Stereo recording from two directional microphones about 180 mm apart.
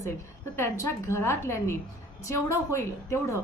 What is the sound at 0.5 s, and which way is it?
A woman's voice, 15° left (ahead or behind).